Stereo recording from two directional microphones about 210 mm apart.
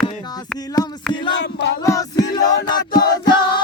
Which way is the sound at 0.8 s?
20° left (ahead or behind).